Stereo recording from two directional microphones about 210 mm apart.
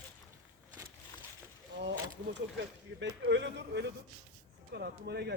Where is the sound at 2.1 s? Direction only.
55° right (ahead or behind).